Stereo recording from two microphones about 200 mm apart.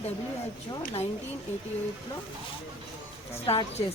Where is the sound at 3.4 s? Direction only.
30° left (ahead or behind).